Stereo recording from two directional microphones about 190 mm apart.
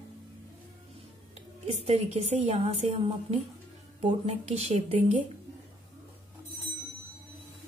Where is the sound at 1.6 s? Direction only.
35° right (ahead or behind).